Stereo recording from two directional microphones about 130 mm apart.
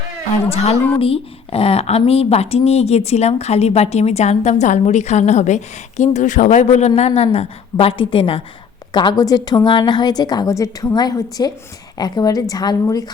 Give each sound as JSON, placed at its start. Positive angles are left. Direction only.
{"t": 0.4, "sound": "a woman's voice", "side_deg": 50}